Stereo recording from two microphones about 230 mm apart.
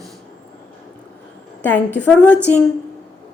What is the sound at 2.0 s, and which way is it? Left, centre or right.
Speech, centre.